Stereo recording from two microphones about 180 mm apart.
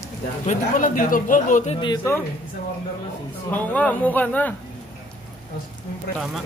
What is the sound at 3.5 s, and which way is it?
Speech, 10° left (ahead or behind).